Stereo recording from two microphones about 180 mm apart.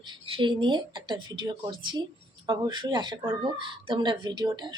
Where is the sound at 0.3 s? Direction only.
25° right (ahead or behind).